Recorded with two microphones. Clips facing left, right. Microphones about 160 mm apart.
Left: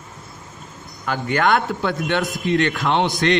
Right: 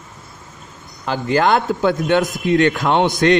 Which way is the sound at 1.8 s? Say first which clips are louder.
Right 6 dB; 45° right (ahead or behind).